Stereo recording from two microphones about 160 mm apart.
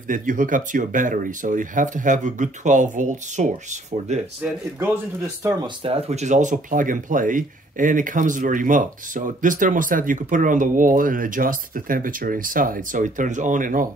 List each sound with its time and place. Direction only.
0.1 s speech: 55° right (ahead or behind)
4.7 s speech: 15° right (ahead or behind)
5.9 s speech: 40° right (ahead or behind); by 13.8 s 55° right (ahead or behind)